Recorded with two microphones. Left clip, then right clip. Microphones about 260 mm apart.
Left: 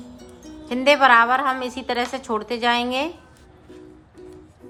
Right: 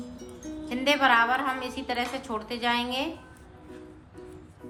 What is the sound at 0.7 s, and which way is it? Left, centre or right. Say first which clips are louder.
A woman's voice: left 8 dB; centre.